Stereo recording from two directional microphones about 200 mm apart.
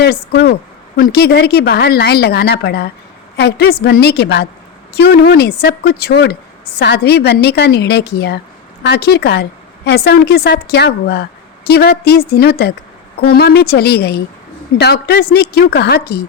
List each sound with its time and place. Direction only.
0.0 s a woman's voice: 55° left (ahead or behind)